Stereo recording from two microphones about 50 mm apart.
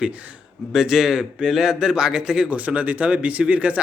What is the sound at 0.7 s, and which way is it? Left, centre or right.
A man's voice, centre.